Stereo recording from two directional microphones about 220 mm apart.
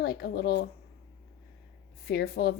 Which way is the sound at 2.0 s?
45° left (ahead or behind).